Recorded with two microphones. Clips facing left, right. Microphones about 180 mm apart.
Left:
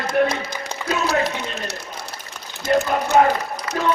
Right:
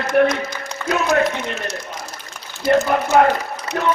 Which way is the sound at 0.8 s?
15° left (ahead or behind).